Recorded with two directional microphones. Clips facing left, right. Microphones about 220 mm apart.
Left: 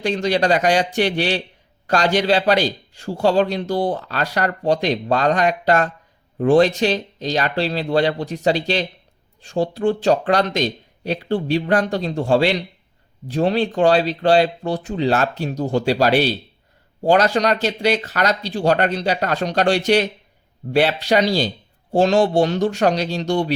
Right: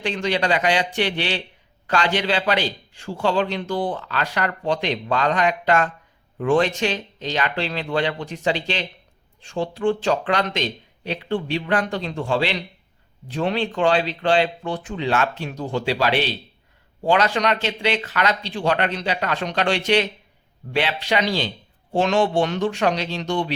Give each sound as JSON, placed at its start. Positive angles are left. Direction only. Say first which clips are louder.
{"t": 0.0, "sound": "speech", "louder": "left 4 dB", "side_deg": 40}